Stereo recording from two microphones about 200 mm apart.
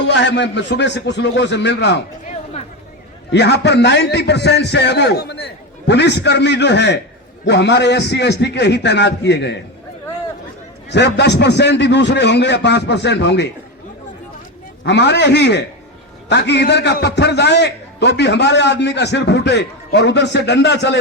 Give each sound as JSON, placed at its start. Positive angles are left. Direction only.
{"t": 0.0, "sound": "a man's voice", "side_deg": 60}
{"t": 3.3, "sound": "a man's voice", "side_deg": 60}
{"t": 10.8, "sound": "a man's voice", "side_deg": 60}
{"t": 14.8, "sound": "a man's voice", "side_deg": 60}